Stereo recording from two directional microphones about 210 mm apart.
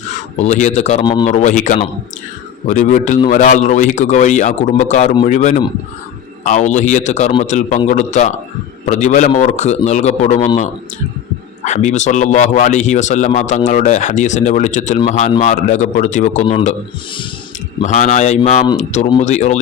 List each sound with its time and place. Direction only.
0.3 s a man's voice: 35° left (ahead or behind)
1.0 s a man's voice: 20° left (ahead or behind)
1.3 s a man's voice: 35° left (ahead or behind)
11.6 s a man's voice: 35° left (ahead or behind)
17.8 s a man's voice: 35° left (ahead or behind)